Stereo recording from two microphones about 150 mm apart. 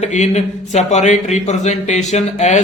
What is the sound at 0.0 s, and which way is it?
Speech, 50° left (ahead or behind).